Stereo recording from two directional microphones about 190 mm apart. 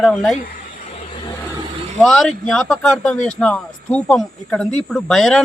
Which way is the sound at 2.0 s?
5° left (ahead or behind).